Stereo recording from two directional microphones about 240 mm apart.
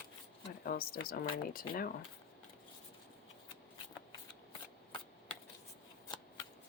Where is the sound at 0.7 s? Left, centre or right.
Left.